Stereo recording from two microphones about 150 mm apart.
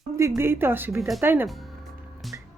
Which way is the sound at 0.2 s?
20° right (ahead or behind).